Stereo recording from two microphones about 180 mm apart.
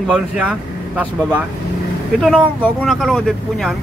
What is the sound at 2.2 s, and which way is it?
Speech, 5° left (ahead or behind).